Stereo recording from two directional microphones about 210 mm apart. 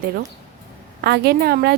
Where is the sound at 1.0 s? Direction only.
50° right (ahead or behind).